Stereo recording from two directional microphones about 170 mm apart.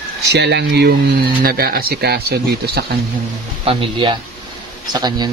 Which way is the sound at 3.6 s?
30° right (ahead or behind).